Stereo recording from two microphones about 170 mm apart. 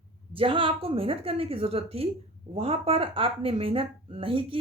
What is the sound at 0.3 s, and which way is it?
A woman's voice, 30° right (ahead or behind).